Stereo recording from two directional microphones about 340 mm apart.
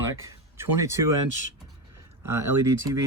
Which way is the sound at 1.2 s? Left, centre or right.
Right.